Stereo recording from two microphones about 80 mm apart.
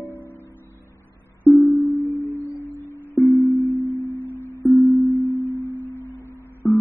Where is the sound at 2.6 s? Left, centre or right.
Right.